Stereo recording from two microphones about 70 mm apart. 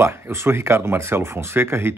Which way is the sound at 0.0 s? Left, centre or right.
Right.